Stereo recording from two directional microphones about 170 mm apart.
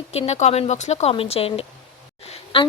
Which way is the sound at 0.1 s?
40° left (ahead or behind).